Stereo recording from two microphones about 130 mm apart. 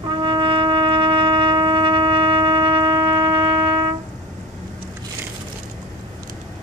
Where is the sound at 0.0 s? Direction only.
40° right (ahead or behind).